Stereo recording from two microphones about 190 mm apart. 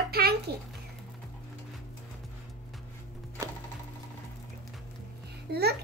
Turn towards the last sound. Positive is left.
turn(degrees=-55)  # may be behind; listen again after turning